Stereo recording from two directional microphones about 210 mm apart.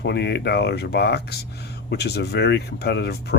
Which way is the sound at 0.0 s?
55° left (ahead or behind).